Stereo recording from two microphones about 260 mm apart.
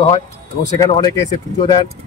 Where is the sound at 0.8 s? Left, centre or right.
Centre.